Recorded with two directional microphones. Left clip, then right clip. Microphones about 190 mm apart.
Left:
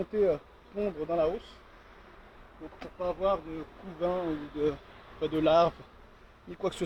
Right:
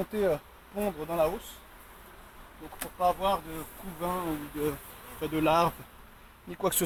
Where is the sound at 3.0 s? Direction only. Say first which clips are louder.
Right 3 dB; 55° right (ahead or behind).